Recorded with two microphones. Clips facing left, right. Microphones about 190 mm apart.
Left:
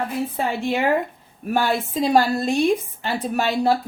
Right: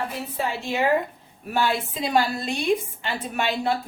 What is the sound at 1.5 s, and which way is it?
A woman's voice, 45° left (ahead or behind).